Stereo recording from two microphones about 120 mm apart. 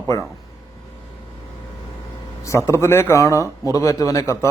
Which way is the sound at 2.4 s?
25° left (ahead or behind).